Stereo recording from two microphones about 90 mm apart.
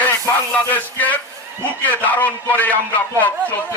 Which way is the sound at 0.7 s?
15° left (ahead or behind).